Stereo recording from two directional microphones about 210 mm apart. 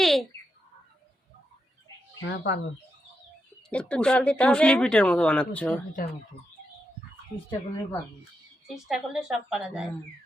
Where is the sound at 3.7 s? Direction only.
5° left (ahead or behind).